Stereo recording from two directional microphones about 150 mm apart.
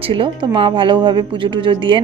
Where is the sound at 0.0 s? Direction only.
35° right (ahead or behind).